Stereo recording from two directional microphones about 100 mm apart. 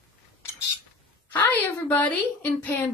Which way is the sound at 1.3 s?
20° left (ahead or behind).